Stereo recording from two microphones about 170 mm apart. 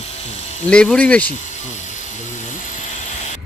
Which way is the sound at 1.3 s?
45° left (ahead or behind).